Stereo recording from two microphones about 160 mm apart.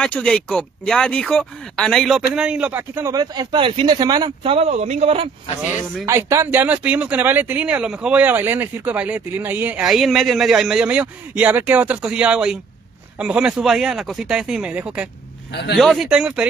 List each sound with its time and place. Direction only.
0.0 s a man's voice: 5° left (ahead or behind); by 5.3 s 40° right (ahead or behind)
6.0 s speech: 20° right (ahead or behind)